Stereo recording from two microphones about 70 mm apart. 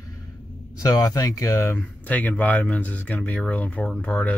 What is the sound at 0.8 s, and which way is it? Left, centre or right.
Speech, left.